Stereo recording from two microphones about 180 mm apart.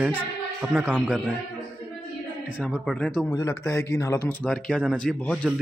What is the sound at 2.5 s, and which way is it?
Speech, 5° right (ahead or behind).